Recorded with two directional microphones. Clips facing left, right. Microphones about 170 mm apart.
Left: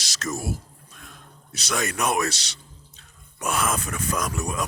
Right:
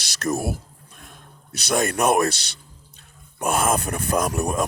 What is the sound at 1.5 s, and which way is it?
Speech, 55° right (ahead or behind).